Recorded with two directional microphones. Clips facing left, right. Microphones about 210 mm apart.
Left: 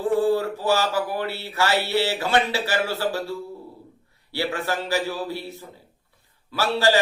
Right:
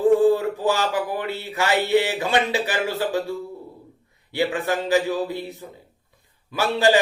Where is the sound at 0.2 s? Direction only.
15° right (ahead or behind).